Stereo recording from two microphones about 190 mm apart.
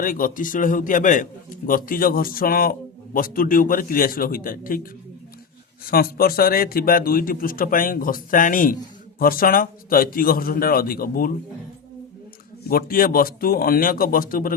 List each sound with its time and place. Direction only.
0.0 s a man's voice: 45° left (ahead or behind)
12.6 s a man's voice: 50° left (ahead or behind)